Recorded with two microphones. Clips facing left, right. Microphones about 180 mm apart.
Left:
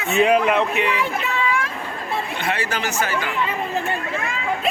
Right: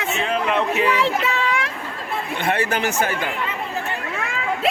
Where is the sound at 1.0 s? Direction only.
80° right.